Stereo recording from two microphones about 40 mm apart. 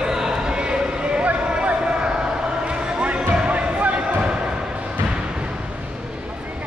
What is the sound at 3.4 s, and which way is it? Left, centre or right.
Basketball bounce, right.